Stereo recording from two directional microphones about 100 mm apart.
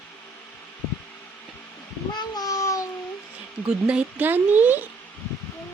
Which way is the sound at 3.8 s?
15° right (ahead or behind).